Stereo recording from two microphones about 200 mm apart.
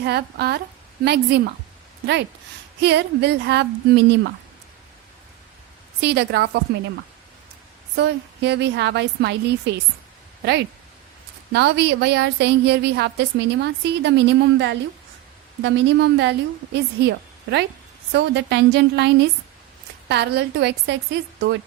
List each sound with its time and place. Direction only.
0.0 s a woman's voice: 55° right (ahead or behind)
2.8 s a woman's voice: 60° right (ahead or behind)
6.0 s a woman's voice: 55° right (ahead or behind)
11.5 s a woman's voice: 55° right (ahead or behind)